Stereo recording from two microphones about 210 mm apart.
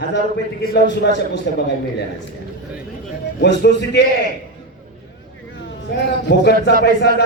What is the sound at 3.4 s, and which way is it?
Speech, 55° left (ahead or behind).